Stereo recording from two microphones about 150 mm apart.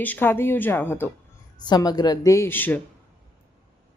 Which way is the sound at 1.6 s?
25° left (ahead or behind).